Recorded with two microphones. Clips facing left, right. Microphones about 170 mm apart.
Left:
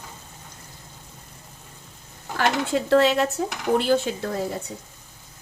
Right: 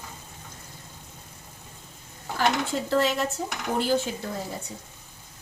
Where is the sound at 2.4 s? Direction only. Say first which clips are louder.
Left 3 dB; 70° left (ahead or behind).